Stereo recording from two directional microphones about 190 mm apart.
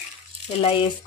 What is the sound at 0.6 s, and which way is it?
Speech, 30° left (ahead or behind).